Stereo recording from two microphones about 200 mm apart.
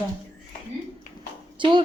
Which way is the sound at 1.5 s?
25° right (ahead or behind).